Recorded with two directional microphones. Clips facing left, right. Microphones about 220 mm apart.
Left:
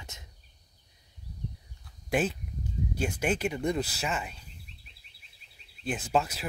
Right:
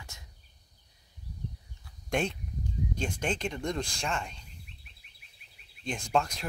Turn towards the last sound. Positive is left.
turn(degrees=5)  # may be behind; listen again after turning